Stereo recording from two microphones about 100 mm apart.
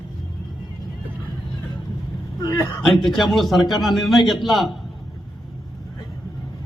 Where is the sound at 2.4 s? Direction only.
40° left (ahead or behind).